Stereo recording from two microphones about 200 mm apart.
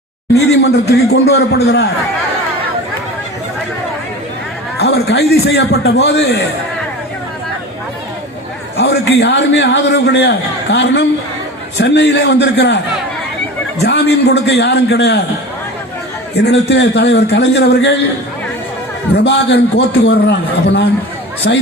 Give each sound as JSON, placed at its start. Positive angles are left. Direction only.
{"t": 0.3, "sound": "a man's voice", "side_deg": 55}
{"t": 4.8, "sound": "a man's voice", "side_deg": 55}
{"t": 8.8, "sound": "a man's voice", "side_deg": 60}
{"t": 13.8, "sound": "a man's voice", "side_deg": 55}
{"t": 16.3, "sound": "a man's voice", "side_deg": 55}
{"t": 19.1, "sound": "a man's voice", "side_deg": 55}